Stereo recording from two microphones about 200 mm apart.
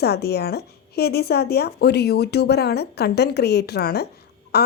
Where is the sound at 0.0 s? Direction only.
55° left (ahead or behind).